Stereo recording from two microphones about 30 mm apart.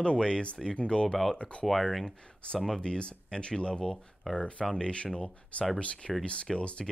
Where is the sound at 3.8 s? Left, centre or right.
Centre.